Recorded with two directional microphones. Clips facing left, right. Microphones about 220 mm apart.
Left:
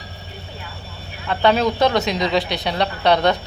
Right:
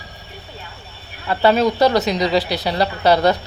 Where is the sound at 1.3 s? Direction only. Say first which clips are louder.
Right 2 dB; 5° right (ahead or behind).